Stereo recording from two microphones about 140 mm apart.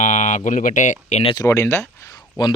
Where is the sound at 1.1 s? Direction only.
45° left (ahead or behind).